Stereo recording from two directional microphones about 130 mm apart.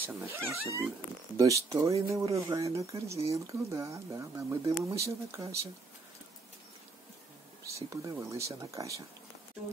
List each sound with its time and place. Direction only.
0.0 s speech: 20° right (ahead or behind)
7.6 s speech: 25° right (ahead or behind)